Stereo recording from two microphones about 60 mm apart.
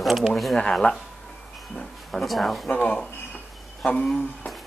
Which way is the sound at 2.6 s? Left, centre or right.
Centre.